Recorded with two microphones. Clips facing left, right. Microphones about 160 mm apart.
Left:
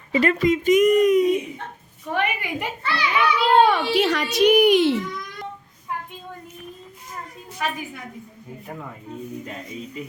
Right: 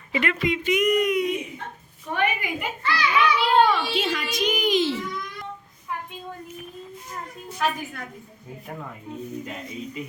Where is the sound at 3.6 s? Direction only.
65° left (ahead or behind).